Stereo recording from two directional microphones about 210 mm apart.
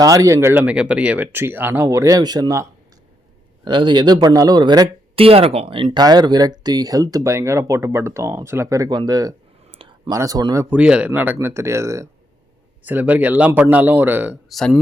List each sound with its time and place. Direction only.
0.0 s speech: 15° right (ahead or behind)
9.7 s a sound: 25° right (ahead or behind)
10.2 s speech: 15° right (ahead or behind); by 14.8 s centre (ahead or behind)